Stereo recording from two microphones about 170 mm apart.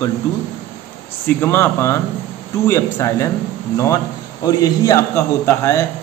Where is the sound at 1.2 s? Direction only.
15° left (ahead or behind).